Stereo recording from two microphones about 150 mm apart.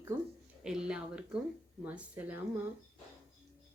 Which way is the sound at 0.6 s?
5° right (ahead or behind).